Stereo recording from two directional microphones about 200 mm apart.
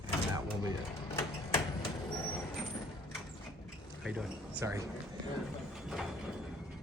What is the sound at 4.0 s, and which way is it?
Speech, 5° right (ahead or behind).